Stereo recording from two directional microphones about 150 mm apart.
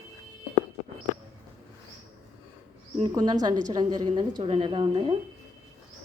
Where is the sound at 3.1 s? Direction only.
25° right (ahead or behind).